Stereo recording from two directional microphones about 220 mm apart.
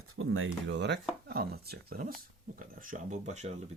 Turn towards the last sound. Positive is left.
turn(degrees=-30)  # may be behind; listen again after turning